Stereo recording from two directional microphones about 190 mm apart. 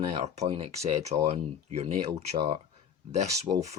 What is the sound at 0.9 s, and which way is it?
Speech, 35° right (ahead or behind).